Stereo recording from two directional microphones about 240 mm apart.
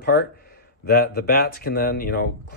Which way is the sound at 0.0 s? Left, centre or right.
Left.